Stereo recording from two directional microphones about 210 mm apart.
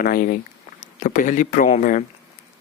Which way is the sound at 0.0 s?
40° left (ahead or behind).